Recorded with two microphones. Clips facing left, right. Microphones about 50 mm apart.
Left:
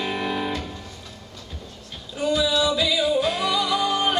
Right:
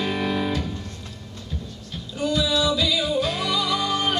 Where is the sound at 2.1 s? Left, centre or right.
Centre.